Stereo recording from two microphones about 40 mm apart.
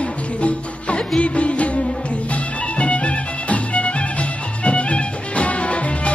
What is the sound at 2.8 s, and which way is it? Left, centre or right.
Music, left.